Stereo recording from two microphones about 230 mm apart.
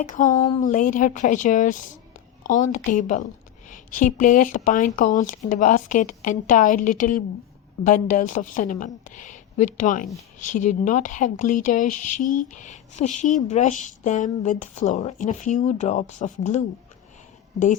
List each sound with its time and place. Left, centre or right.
0.0 s a woman's voice: left